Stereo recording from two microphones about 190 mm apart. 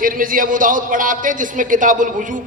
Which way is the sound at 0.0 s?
45° right (ahead or behind).